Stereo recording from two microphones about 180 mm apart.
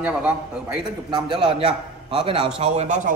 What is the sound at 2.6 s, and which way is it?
Speech, 40° right (ahead or behind).